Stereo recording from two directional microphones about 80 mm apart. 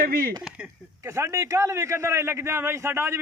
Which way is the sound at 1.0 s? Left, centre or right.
Right.